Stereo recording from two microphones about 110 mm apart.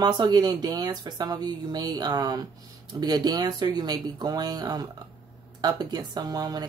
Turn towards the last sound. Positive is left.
turn(degrees=-40)  # may be behind; listen again after turning